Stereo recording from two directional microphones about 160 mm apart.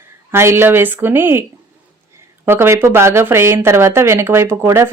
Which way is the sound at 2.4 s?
15° right (ahead or behind).